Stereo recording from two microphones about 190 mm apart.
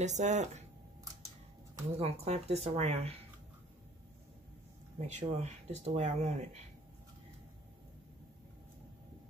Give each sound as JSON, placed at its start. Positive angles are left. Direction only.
{"t": 0.0, "sound": "speech", "side_deg": -35}
{"t": 2.0, "sound": "speech", "side_deg": -35}
{"t": 5.0, "sound": "speech", "side_deg": -35}